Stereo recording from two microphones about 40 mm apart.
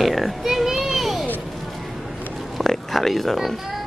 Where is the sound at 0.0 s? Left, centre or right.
Centre.